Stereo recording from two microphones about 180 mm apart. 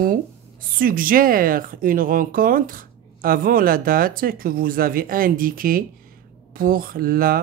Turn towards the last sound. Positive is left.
turn(degrees=-55)  # may be behind; listen again after turning